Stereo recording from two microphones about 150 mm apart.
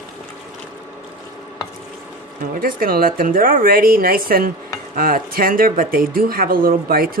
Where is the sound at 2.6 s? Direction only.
75° right (ahead or behind).